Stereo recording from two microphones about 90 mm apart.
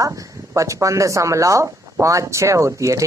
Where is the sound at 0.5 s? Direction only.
35° right (ahead or behind).